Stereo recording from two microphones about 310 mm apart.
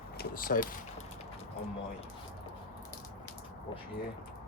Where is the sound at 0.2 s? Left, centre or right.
Left.